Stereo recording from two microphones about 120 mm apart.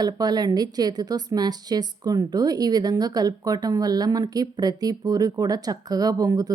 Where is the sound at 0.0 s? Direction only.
35° right (ahead or behind).